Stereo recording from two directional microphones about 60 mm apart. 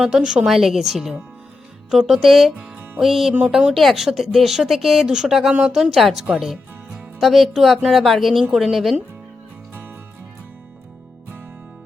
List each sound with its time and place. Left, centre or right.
0.0 s speech: centre
3.4 s speech: centre
3.8 s speech: centre
5.9 s speech: centre